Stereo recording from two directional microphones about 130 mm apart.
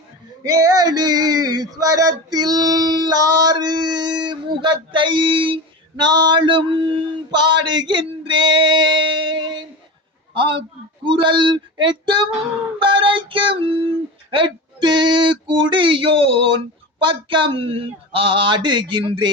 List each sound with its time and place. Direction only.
0.4 s male singing: 30° right (ahead or behind)
10.3 s a man's voice: 40° right (ahead or behind)
11.0 s male singing: 40° right (ahead or behind)
12.8 s female singing: 40° right (ahead or behind)
14.3 s male singing: 40° right (ahead or behind)